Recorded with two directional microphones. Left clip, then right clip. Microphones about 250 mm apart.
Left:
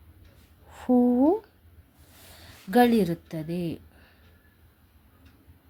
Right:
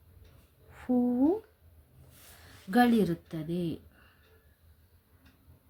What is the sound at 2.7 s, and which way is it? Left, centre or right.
Speech, left.